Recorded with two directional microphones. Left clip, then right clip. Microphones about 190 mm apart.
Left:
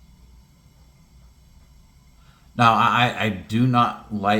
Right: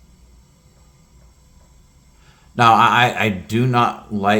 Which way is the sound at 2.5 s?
50° right (ahead or behind).